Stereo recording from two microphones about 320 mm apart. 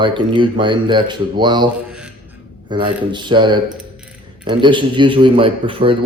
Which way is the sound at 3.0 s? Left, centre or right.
Centre.